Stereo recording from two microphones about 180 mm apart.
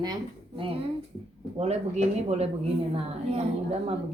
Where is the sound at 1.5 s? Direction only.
35° right (ahead or behind).